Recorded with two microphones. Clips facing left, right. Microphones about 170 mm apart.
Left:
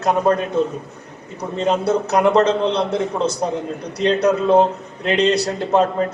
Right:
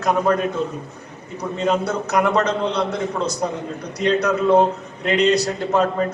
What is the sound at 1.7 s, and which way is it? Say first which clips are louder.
A man's voice: left 3 dB; 30° left (ahead or behind).